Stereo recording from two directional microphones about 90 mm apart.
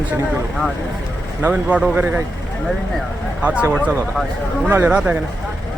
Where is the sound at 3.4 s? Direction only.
15° right (ahead or behind).